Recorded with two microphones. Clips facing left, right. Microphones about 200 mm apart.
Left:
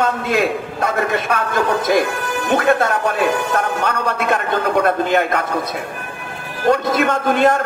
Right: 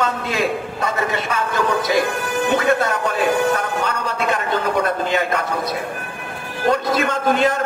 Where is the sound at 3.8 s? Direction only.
60° left (ahead or behind).